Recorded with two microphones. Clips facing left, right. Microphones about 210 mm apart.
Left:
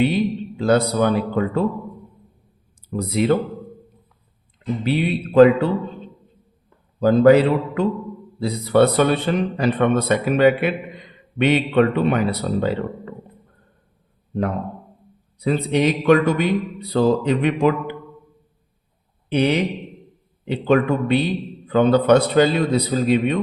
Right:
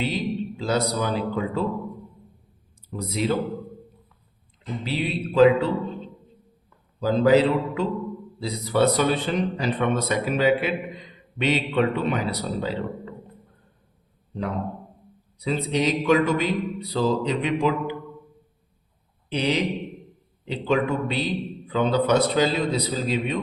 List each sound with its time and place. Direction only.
0.0 s a man's voice: 60° left (ahead or behind)
2.9 s a man's voice: 60° left (ahead or behind)
4.8 s a man's voice: 55° left (ahead or behind)
7.0 s a man's voice: 55° left (ahead or behind)
15.4 s a man's voice: 55° left (ahead or behind)
19.3 s a man's voice: 60° left (ahead or behind)